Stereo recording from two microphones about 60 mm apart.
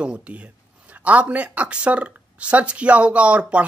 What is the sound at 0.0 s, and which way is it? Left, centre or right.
Speech, right.